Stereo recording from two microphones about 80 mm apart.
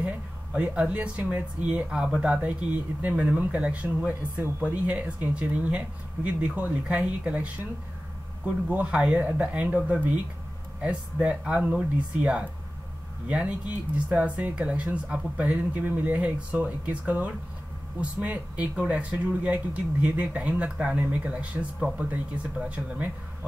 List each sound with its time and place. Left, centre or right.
0.0 s speech: centre
8.6 s speech: centre